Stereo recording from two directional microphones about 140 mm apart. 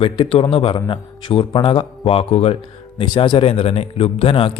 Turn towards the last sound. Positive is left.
turn(degrees=40)  # may be behind; listen again after turning